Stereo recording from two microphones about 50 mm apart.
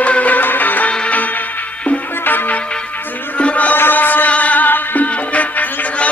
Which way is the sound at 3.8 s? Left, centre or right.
Left.